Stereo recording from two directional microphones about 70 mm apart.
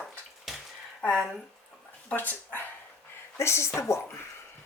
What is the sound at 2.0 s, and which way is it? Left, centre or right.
Speech, left.